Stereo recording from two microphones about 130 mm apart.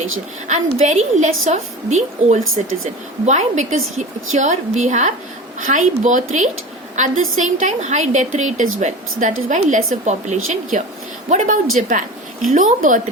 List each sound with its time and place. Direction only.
0.4 s a woman's voice: 70° right (ahead or behind)
5.5 s a woman's voice: 85° right
11.9 s a sound: 80° right
12.5 s speech: 90° right